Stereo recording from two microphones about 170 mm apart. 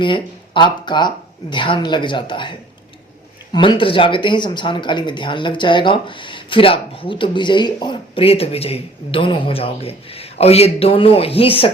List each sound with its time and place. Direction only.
0.0 s speech: 30° left (ahead or behind)